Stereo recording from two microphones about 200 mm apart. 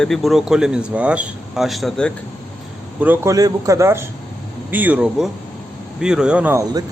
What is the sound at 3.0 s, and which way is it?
A man's voice, 10° right (ahead or behind).